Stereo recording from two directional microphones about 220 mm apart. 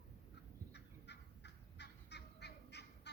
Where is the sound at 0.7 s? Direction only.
50° left (ahead or behind).